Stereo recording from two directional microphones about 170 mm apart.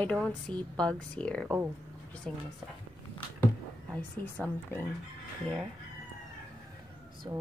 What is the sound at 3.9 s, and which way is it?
Speech, 10° left (ahead or behind).